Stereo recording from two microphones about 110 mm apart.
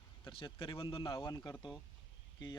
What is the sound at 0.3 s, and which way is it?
Speech, 50° left (ahead or behind).